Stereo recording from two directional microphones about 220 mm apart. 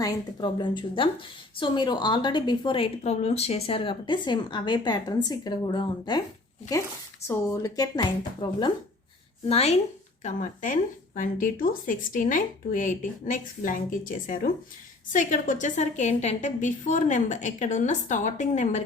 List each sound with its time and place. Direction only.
0.0 s a woman's voice: 15° left (ahead or behind)
7.3 s a woman's voice: 15° left (ahead or behind); by 18.8 s 35° left (ahead or behind)